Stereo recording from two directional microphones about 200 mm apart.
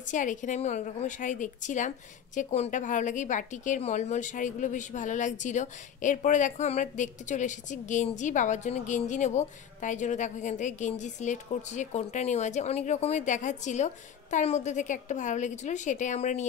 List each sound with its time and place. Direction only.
0.1 s a woman's voice: 40° left (ahead or behind)